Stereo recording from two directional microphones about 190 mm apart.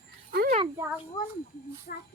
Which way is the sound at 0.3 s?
50° right (ahead or behind).